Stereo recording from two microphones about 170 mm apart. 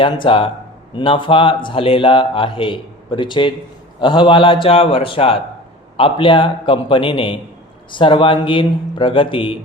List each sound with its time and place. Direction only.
0.0 s speech: 30° left (ahead or behind)